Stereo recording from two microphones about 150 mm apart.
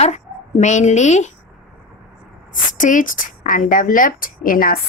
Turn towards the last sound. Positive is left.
turn(degrees=70)  # may be behind; listen again after turning